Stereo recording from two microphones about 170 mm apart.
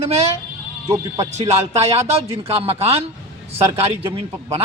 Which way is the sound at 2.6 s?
35° right (ahead or behind).